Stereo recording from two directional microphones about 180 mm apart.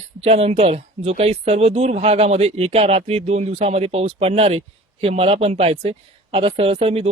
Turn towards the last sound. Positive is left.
turn(degrees=-35)  # may be behind; listen again after turning